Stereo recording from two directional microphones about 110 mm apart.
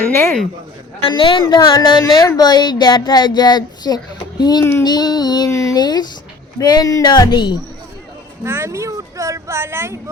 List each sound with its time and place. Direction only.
0.1 s speech: 25° left (ahead or behind)
1.1 s speech: 45° left (ahead or behind)
5.5 s speech: 30° left (ahead or behind)
8.4 s speech: 20° right (ahead or behind)